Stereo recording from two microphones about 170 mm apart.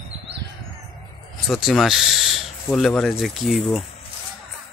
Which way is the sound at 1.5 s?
Centre (ahead or behind).